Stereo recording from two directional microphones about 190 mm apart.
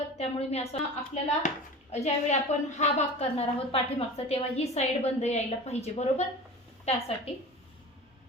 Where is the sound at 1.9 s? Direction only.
35° left (ahead or behind).